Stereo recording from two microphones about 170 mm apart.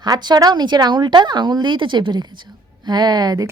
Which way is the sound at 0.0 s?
25° right (ahead or behind).